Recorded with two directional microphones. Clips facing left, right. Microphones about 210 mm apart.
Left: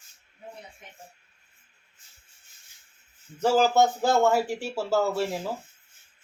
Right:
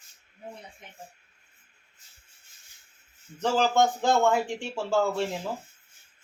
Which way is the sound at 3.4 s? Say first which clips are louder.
Left 3 dB; 10° left (ahead or behind).